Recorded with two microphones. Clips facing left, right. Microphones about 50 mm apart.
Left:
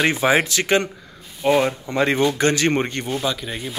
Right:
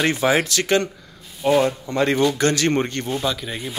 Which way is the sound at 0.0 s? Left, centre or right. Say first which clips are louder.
Left 1 dB; centre.